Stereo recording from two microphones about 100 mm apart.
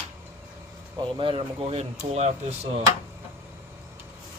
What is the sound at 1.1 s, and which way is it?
Speech, 60° right (ahead or behind).